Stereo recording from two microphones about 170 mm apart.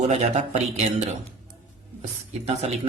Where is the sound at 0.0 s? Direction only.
40° right (ahead or behind).